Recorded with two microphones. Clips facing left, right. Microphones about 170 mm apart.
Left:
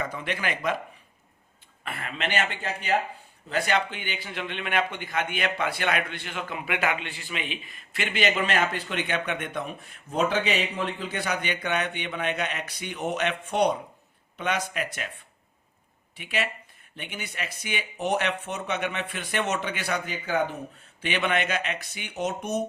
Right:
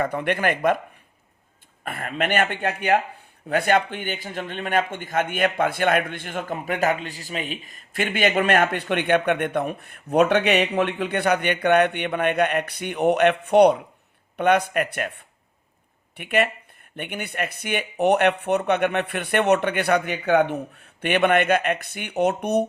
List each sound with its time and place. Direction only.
0.0 s speech: 60° right (ahead or behind)
1.8 s speech: 50° right (ahead or behind)